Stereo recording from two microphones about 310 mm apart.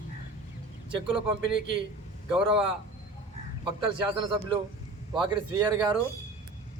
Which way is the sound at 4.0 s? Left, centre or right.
Centre.